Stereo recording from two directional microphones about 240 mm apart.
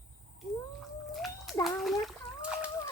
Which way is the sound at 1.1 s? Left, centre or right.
Centre.